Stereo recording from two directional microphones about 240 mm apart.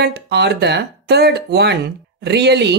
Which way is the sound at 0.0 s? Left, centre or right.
Right.